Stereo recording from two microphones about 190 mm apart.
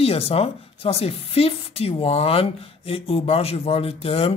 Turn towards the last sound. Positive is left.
turn(degrees=30)  # may be behind; listen again after turning